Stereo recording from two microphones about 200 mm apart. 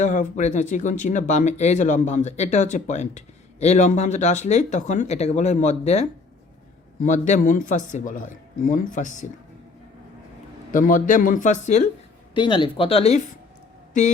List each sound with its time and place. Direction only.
0.0 s speech: 35° left (ahead or behind)
10.7 s speech: 40° left (ahead or behind)
12.3 s speech: 25° left (ahead or behind)